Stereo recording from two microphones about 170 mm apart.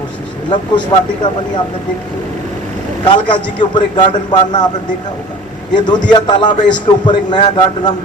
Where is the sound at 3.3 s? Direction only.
25° left (ahead or behind).